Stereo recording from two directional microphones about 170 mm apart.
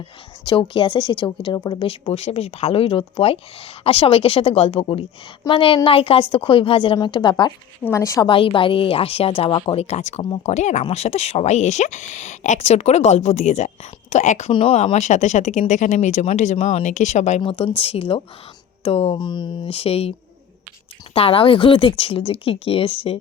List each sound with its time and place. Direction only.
0.4 s a woman's voice: 30° left (ahead or behind)
8.3 s speech: 30° left (ahead or behind)